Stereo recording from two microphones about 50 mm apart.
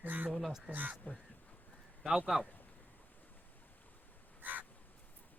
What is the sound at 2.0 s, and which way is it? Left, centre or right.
Speech, centre.